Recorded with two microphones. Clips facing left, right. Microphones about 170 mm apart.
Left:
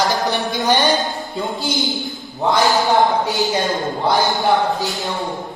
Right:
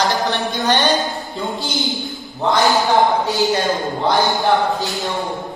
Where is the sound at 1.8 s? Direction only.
Centre (ahead or behind).